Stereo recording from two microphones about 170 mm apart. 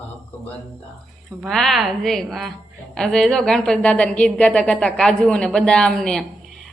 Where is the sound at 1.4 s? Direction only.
Centre (ahead or behind).